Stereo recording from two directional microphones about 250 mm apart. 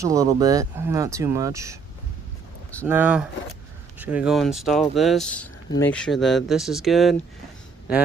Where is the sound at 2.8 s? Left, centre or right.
Centre.